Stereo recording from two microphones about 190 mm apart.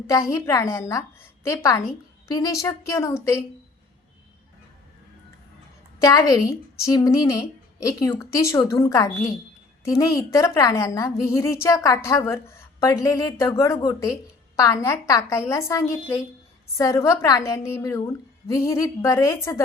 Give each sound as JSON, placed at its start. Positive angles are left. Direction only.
{"t": 0.1, "sound": "a woman's voice", "side_deg": 15}
{"t": 6.0, "sound": "a woman's voice", "side_deg": 20}